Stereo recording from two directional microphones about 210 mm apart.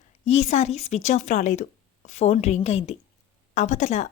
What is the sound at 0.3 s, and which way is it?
A woman's voice, 30° left (ahead or behind).